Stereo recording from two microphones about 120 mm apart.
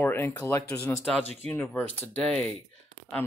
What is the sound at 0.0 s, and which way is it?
Speech, 20° left (ahead or behind).